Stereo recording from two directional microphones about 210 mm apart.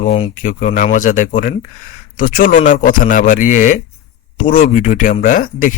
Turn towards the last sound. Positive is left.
turn(degrees=40)  # may be behind; listen again after turning